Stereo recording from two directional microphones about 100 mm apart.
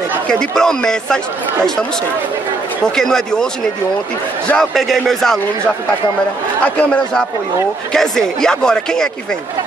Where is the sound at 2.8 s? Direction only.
5° left (ahead or behind).